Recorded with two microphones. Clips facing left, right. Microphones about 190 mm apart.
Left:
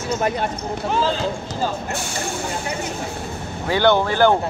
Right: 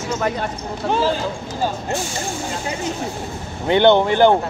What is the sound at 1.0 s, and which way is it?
Speech, 15° right (ahead or behind).